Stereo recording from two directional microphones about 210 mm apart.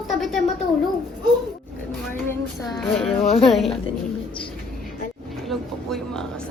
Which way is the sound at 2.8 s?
Centre (ahead or behind).